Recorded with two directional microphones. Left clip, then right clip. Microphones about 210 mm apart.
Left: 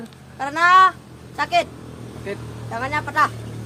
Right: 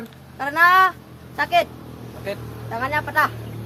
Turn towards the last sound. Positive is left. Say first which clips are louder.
# even
turn(degrees=0)  # may be behind; listen again after turning